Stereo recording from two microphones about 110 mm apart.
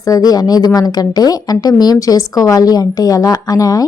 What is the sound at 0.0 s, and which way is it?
A woman's voice, 35° left (ahead or behind).